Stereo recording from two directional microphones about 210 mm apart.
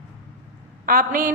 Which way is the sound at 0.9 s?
40° right (ahead or behind).